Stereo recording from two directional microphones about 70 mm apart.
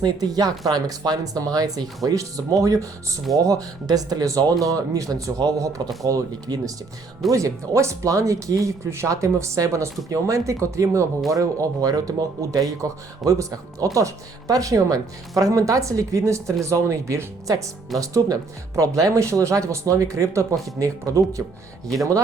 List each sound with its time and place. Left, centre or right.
0.0 s a man's voice: right